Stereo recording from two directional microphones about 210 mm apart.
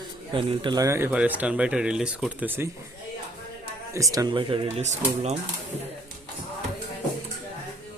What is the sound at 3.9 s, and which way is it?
Speech, 15° right (ahead or behind).